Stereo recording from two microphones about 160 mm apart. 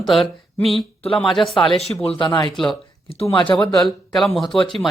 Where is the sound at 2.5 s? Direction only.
5° left (ahead or behind).